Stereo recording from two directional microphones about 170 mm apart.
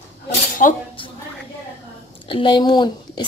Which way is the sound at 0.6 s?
50° left (ahead or behind).